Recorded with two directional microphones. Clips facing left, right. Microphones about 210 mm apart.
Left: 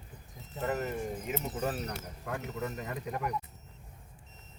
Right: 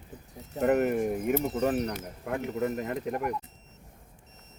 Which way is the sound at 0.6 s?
65° right (ahead or behind).